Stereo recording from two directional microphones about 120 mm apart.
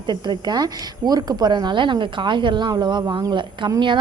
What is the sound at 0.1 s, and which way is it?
Speech, 35° right (ahead or behind).